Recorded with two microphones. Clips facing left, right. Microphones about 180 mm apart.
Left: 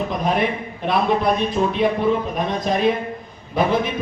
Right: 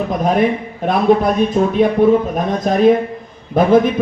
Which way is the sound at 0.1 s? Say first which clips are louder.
Right 9 dB; 45° right (ahead or behind).